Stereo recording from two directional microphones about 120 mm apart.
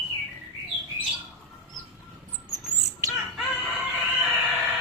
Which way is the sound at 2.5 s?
30° right (ahead or behind).